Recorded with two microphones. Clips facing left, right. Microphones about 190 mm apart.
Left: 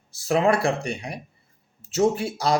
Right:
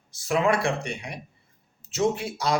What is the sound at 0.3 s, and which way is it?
Speech, 35° left (ahead or behind).